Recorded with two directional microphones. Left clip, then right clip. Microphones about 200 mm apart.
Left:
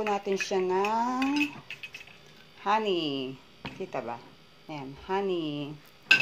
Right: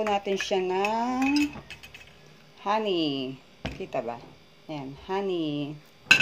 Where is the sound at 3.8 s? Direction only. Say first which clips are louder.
Right 3 dB; centre (ahead or behind).